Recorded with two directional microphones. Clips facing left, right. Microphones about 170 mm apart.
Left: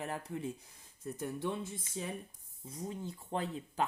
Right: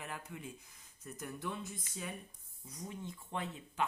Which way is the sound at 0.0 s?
35° left (ahead or behind).